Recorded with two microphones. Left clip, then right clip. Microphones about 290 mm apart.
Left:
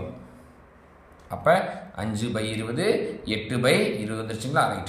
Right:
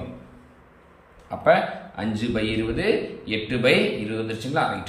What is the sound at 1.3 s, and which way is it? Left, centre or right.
A man's voice, left.